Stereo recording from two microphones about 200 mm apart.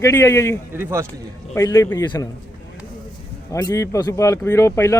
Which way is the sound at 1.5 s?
15° left (ahead or behind).